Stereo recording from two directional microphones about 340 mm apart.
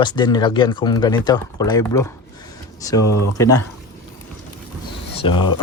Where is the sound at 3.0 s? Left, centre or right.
Left.